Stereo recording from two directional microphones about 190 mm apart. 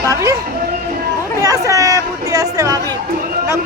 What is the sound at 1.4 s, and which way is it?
Chatter, 15° right (ahead or behind).